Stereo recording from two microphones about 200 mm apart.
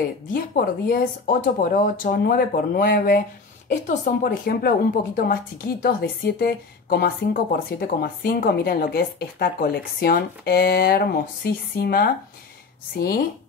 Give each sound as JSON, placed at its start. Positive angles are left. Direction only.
{"t": 0.3, "sound": "speech", "side_deg": 45}